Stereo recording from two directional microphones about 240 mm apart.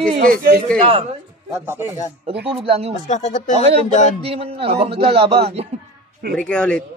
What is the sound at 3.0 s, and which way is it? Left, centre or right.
Speech, left.